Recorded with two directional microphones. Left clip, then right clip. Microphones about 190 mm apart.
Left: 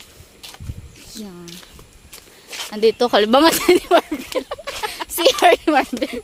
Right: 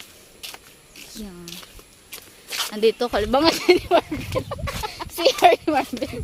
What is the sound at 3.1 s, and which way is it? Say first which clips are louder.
Speech: left 7 dB; 60° left (ahead or behind).